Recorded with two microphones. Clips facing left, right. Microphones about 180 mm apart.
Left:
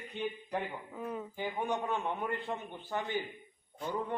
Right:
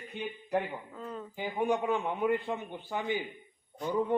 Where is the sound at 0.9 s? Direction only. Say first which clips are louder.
Left 5 dB; 10° left (ahead or behind).